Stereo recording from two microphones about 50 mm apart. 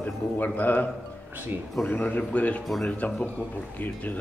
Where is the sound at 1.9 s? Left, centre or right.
Left.